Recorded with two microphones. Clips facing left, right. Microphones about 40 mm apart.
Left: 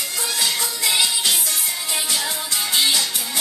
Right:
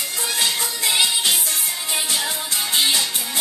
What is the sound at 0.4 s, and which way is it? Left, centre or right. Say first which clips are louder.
Music: even; right.